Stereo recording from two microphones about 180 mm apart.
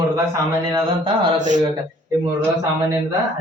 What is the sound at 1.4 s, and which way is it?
Speech, 40° right (ahead or behind).